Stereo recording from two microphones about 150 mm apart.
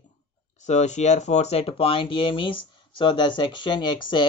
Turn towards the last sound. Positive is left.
turn(degrees=30)  # may be behind; listen again after turning